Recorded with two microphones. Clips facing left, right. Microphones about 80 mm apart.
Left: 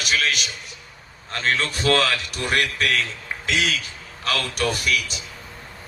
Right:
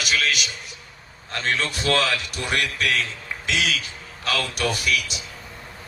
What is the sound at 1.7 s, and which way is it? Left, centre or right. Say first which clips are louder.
A man's voice: left 2 dB; left.